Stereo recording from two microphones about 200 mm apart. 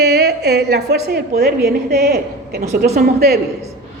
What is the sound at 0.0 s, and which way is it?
A woman's voice, 55° right (ahead or behind).